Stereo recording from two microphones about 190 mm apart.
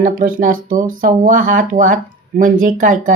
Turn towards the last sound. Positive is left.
turn(degrees=-45)  # may be behind; listen again after turning